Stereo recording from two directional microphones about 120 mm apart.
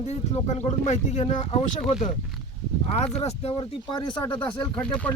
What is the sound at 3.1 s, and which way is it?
Speech, 55° left (ahead or behind).